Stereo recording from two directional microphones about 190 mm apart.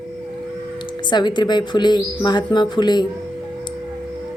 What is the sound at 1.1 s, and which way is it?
Speech, 25° left (ahead or behind).